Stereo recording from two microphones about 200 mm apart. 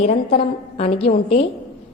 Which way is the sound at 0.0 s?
30° left (ahead or behind).